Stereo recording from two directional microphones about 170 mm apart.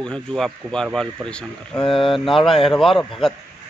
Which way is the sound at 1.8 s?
30° left (ahead or behind).